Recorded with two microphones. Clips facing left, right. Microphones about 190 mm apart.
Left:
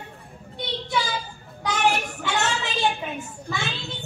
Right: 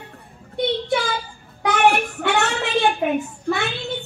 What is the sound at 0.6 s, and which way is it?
Child singing, 55° right (ahead or behind).